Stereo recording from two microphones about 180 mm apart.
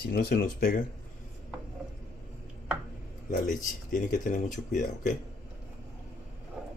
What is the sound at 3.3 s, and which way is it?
Speech, 45° left (ahead or behind).